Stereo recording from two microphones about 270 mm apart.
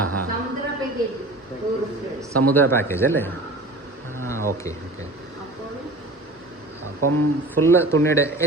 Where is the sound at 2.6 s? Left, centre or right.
Centre.